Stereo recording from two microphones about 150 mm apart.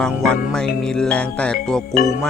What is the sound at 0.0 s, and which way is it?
Music, 5° left (ahead or behind).